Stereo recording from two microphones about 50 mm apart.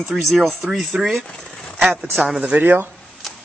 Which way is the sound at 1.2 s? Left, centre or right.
Centre.